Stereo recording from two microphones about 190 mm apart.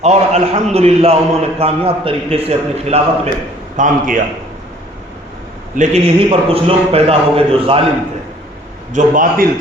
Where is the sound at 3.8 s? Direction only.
45° right (ahead or behind).